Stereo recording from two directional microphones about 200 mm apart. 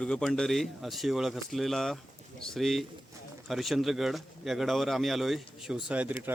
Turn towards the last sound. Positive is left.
turn(degrees=-10)  # may be behind; listen again after turning